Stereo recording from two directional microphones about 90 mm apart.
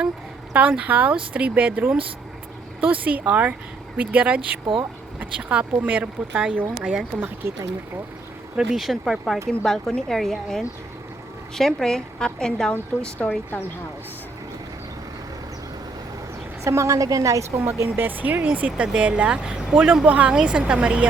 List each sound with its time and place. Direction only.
0.5 s speech: 15° right (ahead or behind)
8.5 s a woman's voice: centre (ahead or behind); by 13.7 s 20° left (ahead or behind)
16.6 s a woman's voice: 35° right (ahead or behind)
17.6 s speech: 30° right (ahead or behind); by 21.1 s 15° right (ahead or behind)